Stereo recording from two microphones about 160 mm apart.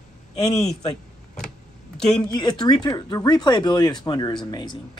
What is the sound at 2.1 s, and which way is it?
Speech, 25° left (ahead or behind).